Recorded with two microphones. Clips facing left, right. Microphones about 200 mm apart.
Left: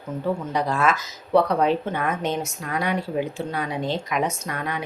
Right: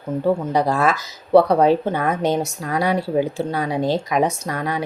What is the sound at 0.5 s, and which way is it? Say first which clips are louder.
Speech: right 4 dB; 35° right (ahead or behind).